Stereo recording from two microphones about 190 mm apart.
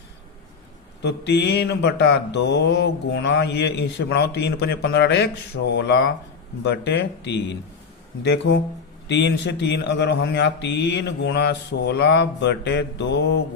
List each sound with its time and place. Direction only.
1.0 s speech: 60° left (ahead or behind)